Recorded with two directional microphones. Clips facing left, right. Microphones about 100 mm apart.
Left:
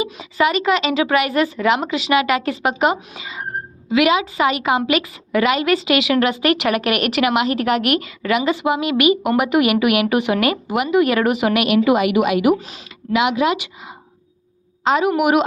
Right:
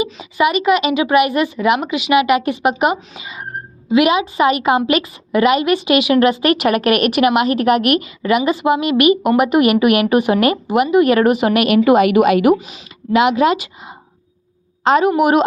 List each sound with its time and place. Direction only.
0.2 s a woman's voice: 15° right (ahead or behind)
3.9 s a woman's voice: 25° right (ahead or behind); by 12.5 s 45° right (ahead or behind)
12.5 s a woman's voice: 5° right (ahead or behind)
13.1 s a woman's voice: 40° right (ahead or behind)